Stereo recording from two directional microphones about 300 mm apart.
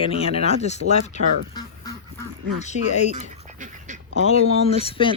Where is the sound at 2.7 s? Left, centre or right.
Left.